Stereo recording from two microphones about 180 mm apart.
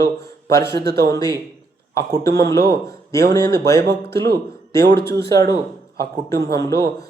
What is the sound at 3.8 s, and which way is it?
Speech, 65° right (ahead or behind).